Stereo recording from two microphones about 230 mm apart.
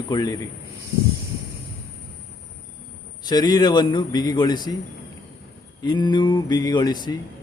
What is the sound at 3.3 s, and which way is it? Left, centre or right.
A man's voice, centre.